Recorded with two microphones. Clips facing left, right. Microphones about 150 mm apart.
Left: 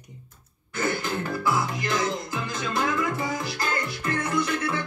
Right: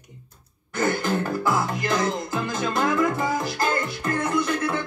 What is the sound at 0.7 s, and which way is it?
Music, 45° right (ahead or behind).